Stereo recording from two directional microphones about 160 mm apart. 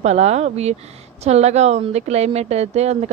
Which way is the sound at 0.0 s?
45° right (ahead or behind).